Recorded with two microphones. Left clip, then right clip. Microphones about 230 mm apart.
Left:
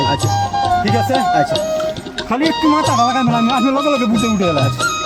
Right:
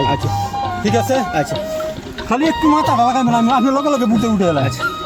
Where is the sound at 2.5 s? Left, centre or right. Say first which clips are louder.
Even; left.